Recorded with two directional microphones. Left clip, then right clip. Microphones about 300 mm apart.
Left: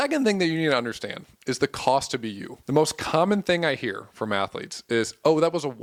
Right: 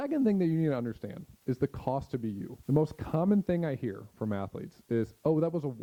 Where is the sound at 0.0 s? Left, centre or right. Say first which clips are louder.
Left 7 dB; centre.